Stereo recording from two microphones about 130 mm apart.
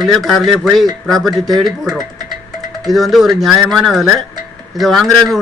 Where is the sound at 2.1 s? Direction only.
30° right (ahead or behind).